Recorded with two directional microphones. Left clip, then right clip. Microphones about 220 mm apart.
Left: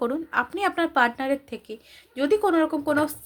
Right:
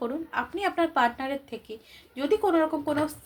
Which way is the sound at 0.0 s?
50° left (ahead or behind).